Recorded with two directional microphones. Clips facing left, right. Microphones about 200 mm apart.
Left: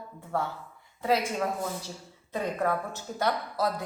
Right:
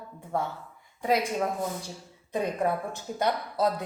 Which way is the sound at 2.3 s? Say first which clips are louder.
Right 1 dB; 15° right (ahead or behind).